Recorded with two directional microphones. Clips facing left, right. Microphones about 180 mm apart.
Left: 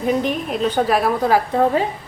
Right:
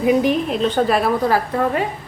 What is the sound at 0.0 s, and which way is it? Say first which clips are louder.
Speech: right 3 dB; 10° right (ahead or behind).